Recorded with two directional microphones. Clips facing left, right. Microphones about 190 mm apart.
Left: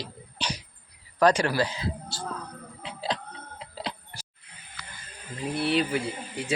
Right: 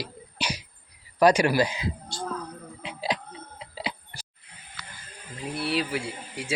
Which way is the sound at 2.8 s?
10° right (ahead or behind).